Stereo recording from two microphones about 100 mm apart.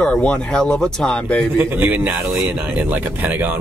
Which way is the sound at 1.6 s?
20° right (ahead or behind).